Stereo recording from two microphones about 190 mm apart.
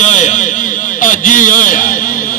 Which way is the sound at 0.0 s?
40° left (ahead or behind).